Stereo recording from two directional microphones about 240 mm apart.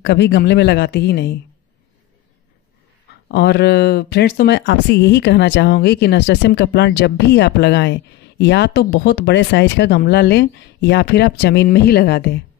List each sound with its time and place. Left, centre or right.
0.0 s speech: left
3.3 s speech: left